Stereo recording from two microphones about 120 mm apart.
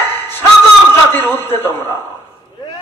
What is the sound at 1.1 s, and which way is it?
Speech, 20° left (ahead or behind).